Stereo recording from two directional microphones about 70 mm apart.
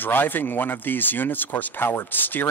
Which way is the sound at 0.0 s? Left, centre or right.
Left.